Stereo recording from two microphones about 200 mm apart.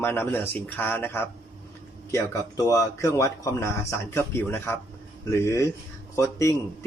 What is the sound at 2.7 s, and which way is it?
Speech, 15° left (ahead or behind).